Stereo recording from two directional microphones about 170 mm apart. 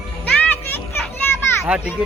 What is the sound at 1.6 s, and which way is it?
Speech, 5° right (ahead or behind).